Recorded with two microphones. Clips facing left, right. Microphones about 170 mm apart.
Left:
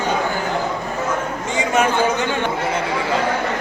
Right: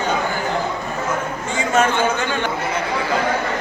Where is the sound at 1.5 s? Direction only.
15° left (ahead or behind).